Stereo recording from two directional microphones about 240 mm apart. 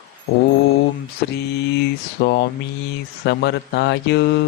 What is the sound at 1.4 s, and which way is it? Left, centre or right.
Speech, left.